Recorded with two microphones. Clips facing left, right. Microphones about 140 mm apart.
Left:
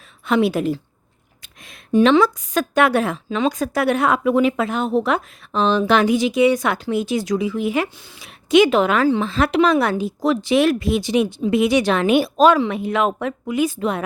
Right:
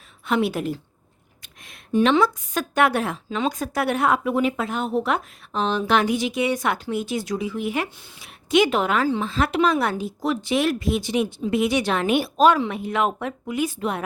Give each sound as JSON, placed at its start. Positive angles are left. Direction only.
{"t": 0.3, "sound": "a woman's voice", "side_deg": 90}